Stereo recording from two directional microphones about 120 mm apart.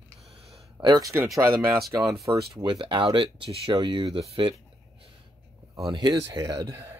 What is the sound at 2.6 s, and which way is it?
Speech, 45° right (ahead or behind).